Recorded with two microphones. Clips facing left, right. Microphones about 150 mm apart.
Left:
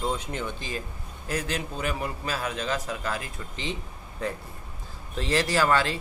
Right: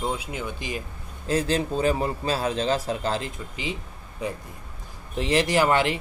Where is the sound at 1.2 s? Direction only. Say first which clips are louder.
Right 7 dB; 30° right (ahead or behind).